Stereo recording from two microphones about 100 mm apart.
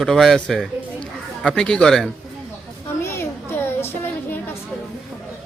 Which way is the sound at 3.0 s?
25° left (ahead or behind).